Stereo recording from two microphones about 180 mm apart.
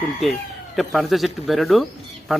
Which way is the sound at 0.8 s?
Centre (ahead or behind).